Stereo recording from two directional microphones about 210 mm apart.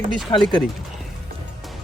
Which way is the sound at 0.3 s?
20° left (ahead or behind).